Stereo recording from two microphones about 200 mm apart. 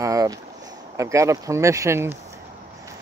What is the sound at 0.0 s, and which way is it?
Speech, 15° right (ahead or behind).